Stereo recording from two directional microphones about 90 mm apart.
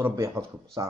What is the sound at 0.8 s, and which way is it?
Speech, 45° right (ahead or behind).